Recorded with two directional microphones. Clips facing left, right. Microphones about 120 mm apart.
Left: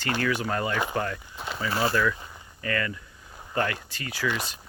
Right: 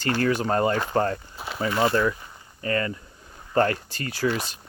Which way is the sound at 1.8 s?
25° right (ahead or behind).